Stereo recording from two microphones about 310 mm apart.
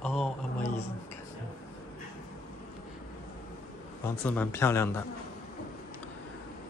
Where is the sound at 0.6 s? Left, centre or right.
Left.